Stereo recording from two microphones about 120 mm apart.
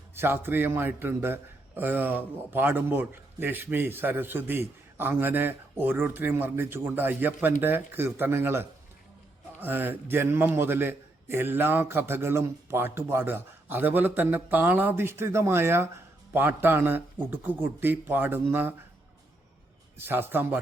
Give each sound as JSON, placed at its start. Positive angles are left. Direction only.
{"t": 0.2, "sound": "a man's voice", "side_deg": -20}
{"t": 20.0, "sound": "a man's voice", "side_deg": -20}